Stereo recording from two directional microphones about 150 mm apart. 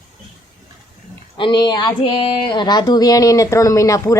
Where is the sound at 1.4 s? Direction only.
30° left (ahead or behind).